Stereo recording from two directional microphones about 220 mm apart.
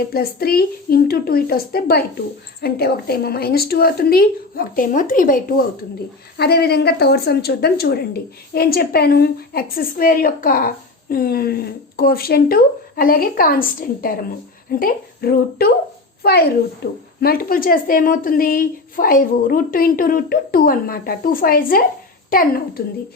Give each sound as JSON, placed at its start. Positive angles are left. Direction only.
{"t": 0.1, "sound": "a woman's voice", "side_deg": 45}